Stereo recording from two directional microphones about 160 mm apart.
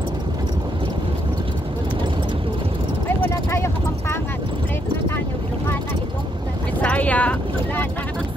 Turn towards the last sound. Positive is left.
turn(degrees=10)  # may be behind; listen again after turning